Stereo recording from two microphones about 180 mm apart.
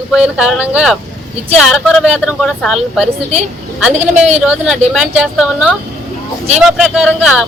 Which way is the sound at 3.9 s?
40° right (ahead or behind).